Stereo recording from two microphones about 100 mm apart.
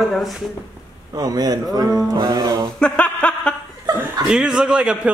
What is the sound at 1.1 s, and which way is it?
Speech, 40° right (ahead or behind).